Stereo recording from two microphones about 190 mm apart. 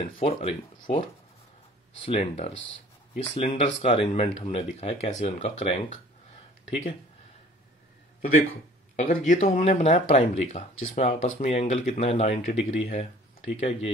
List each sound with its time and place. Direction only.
0.0 s speech: 35° left (ahead or behind)
2.0 s speech: 35° left (ahead or behind)
8.9 s speech: 40° left (ahead or behind)